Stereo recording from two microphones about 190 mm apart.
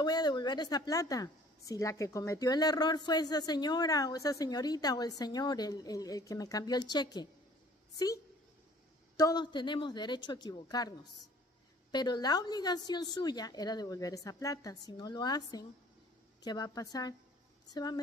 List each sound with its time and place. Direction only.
0.0 s a woman's voice: 20° left (ahead or behind)
9.1 s a woman's voice: 20° left (ahead or behind)